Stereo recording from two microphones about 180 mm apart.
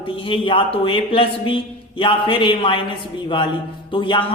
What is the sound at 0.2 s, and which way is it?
A man's voice, 30° left (ahead or behind).